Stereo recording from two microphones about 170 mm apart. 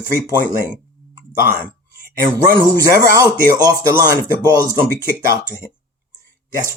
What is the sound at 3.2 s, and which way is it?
Speech, 20° right (ahead or behind).